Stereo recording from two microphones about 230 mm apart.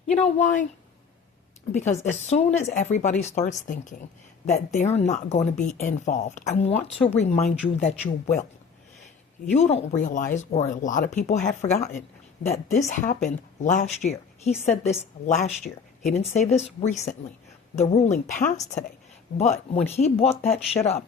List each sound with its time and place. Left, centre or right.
0.1 s speech: left
1.9 s speech: left
9.5 s speech: left